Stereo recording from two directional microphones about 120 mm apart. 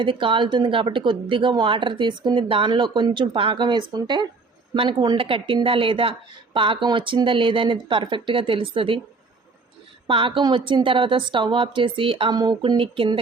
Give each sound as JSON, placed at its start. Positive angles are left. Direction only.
{"t": 0.0, "sound": "a woman's voice", "side_deg": -45}
{"t": 10.1, "sound": "a woman's voice", "side_deg": -45}
{"t": 12.3, "sound": "speech", "side_deg": -35}
{"t": 12.7, "sound": "a woman's voice", "side_deg": -50}